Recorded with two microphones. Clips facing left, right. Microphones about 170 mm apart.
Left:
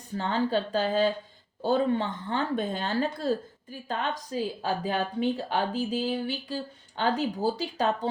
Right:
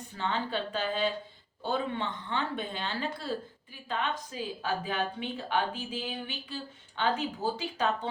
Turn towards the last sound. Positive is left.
turn(degrees=35)  # may be behind; listen again after turning